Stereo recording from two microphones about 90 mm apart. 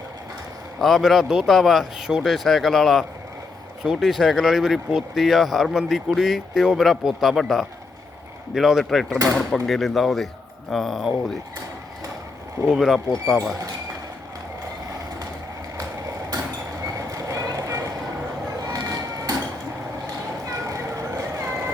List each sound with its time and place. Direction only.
0.8 s speech: centre (ahead or behind)
12.6 s speech: 5° right (ahead or behind)
16.8 s vehicle: 35° right (ahead or behind)
18.7 s music: 40° right (ahead or behind)
20.5 s a sound: 35° right (ahead or behind)
21.4 s vehicle: 25° right (ahead or behind)